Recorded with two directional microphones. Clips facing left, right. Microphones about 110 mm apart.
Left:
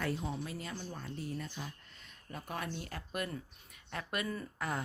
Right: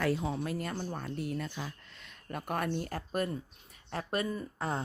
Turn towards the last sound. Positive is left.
turn(degrees=-25)  # may be behind; listen again after turning